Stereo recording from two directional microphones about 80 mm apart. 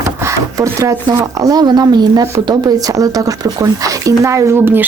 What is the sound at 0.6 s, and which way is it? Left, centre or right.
Speech, right.